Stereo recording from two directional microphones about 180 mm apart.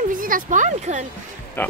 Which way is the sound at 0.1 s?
50° right (ahead or behind).